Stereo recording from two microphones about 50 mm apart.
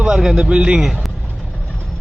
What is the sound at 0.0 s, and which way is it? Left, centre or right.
Speech, centre.